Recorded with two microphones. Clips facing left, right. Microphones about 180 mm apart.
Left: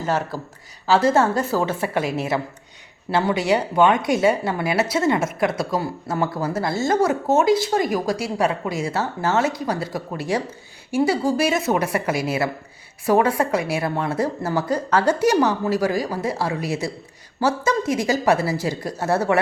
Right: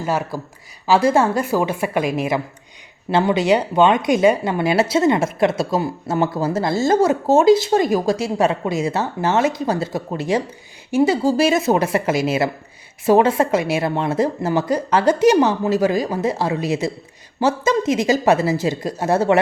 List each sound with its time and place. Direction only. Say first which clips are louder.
0.0 s a woman's voice: right 1 dB; 10° right (ahead or behind)